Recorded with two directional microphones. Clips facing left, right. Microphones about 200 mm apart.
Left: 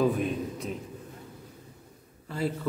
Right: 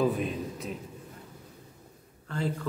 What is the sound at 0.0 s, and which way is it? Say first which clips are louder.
Speech: left 2 dB; centre (ahead or behind).